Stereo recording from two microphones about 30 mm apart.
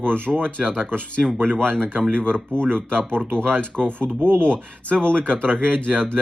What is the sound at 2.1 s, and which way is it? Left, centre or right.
Speech, left.